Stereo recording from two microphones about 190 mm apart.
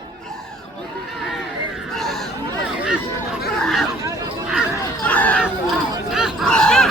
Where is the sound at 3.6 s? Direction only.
Centre (ahead or behind).